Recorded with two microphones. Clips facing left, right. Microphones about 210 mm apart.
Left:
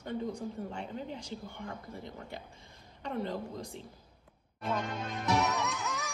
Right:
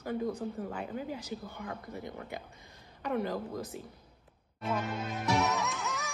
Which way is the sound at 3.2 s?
25° left (ahead or behind).